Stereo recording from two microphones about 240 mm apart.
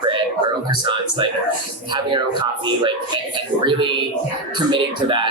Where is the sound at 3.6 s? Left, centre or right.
Centre.